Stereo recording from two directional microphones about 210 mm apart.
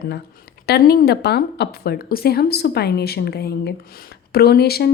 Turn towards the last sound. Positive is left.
turn(degrees=50)  # may be behind; listen again after turning